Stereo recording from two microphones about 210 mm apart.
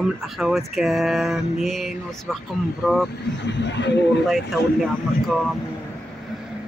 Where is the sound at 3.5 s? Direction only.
55° left (ahead or behind).